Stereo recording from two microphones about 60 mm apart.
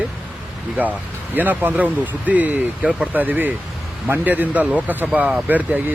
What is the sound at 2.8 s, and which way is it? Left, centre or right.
Speech, centre.